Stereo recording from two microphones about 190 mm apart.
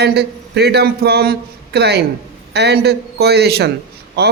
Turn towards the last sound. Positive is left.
turn(degrees=-60)  # may be behind; listen again after turning